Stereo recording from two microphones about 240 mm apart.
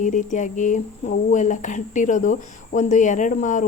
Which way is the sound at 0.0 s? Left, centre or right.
Left.